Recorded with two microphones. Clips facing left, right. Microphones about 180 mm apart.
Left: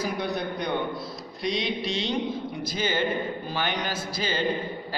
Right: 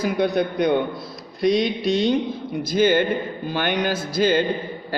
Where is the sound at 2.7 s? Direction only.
60° right (ahead or behind).